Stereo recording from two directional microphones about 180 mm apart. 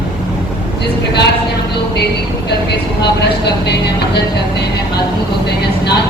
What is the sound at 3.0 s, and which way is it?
Speech, 70° left (ahead or behind).